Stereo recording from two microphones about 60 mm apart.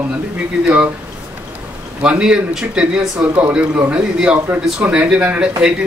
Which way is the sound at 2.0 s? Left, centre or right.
Centre.